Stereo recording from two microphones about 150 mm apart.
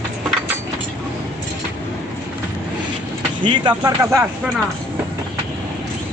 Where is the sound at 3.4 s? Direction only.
25° right (ahead or behind).